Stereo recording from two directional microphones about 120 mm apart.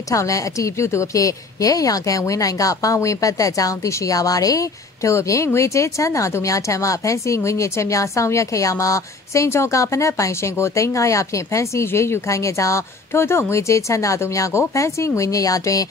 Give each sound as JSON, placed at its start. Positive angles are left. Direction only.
{"t": 0.1, "sound": "a woman's voice", "side_deg": 25}